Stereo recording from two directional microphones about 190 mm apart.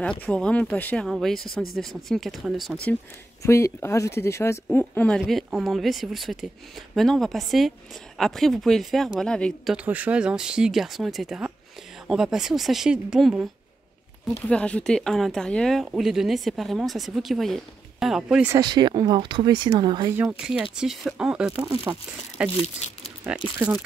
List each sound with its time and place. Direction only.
0.2 s speech: 5° left (ahead or behind)
3.4 s speech: 15° left (ahead or behind)
9.8 s speech: 10° right (ahead or behind)
14.3 s speech: 5° left (ahead or behind)
18.5 s speech: 20° right (ahead or behind)
20.2 s speech: 5° right (ahead or behind)
22.8 s speech: 35° left (ahead or behind)
23.3 s speech: 5° right (ahead or behind)